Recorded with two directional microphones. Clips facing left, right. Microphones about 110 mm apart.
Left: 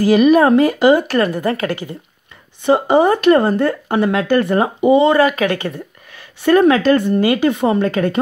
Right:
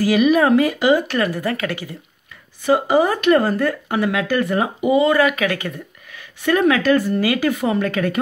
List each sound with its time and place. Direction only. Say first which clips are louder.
0.0 s a woman's voice: left 4 dB; 40° left (ahead or behind)